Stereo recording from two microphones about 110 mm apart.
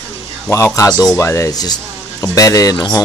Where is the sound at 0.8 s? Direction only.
35° left (ahead or behind).